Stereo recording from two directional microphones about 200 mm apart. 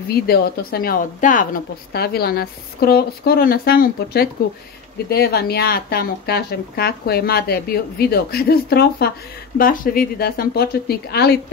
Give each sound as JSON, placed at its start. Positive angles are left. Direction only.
{"t": 0.1, "sound": "a woman's voice", "side_deg": 50}